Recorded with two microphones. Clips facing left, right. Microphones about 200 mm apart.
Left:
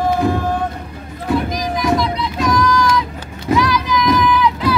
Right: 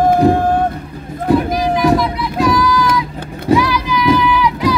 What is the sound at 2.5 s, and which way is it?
Child singing, 5° right (ahead or behind).